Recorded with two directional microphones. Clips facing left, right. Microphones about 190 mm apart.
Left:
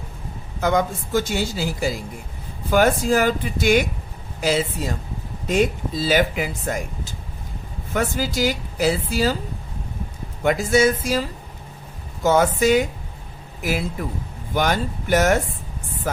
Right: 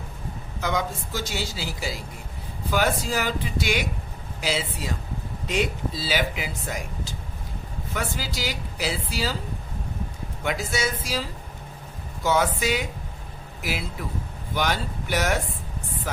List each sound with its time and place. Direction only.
0.6 s speech: 50° left (ahead or behind)
10.4 s speech: 50° left (ahead or behind)